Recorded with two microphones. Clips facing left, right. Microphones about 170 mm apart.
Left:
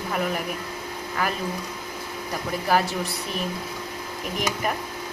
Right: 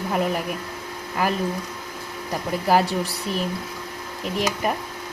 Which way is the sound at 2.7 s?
30° right (ahead or behind).